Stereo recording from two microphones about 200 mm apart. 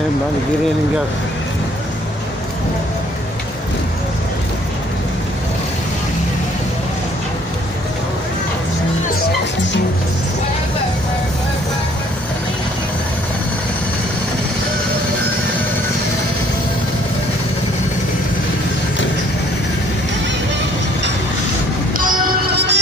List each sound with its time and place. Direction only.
21.9 s music: 45° right (ahead or behind)